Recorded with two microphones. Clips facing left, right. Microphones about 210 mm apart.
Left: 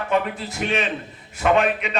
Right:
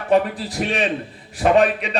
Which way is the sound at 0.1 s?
35° right (ahead or behind).